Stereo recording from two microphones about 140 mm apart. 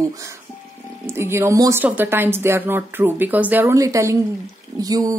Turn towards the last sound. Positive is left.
turn(degrees=-25)  # may be behind; listen again after turning